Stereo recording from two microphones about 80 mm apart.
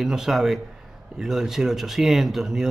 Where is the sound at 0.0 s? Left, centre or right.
Centre.